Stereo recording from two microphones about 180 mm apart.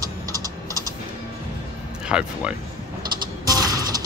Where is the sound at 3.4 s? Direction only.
20° right (ahead or behind).